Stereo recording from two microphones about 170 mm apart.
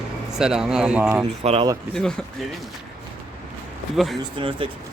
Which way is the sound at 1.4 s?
35° right (ahead or behind).